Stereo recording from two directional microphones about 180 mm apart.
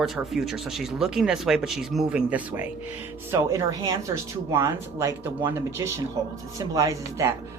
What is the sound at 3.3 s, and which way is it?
Speech, 20° right (ahead or behind).